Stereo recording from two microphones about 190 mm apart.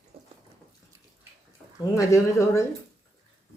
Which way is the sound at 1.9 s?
15° left (ahead or behind).